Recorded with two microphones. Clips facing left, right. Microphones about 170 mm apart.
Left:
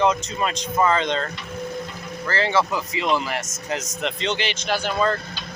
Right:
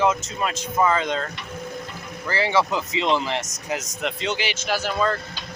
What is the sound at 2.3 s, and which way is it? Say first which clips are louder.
Speech: even; 15° right (ahead or behind).